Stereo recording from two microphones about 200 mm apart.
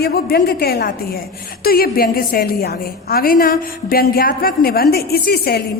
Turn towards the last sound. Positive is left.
turn(degrees=50)  # may be behind; listen again after turning